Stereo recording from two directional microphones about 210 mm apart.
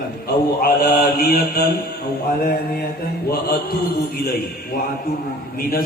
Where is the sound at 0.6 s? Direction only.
45° left (ahead or behind).